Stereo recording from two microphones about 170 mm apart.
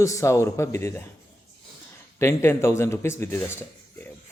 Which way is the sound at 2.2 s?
15° left (ahead or behind).